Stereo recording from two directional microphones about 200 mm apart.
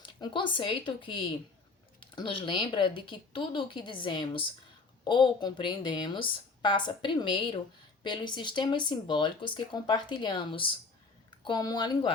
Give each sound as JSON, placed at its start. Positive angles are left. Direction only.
{"t": 0.2, "sound": "speech", "side_deg": 25}